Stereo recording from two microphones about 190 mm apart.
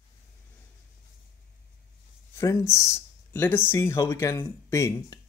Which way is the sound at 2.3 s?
15° left (ahead or behind).